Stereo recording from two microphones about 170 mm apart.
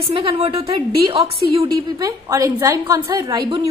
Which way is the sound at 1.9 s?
20° right (ahead or behind).